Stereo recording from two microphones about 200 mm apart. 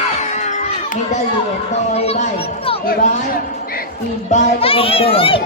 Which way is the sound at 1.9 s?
30° left (ahead or behind).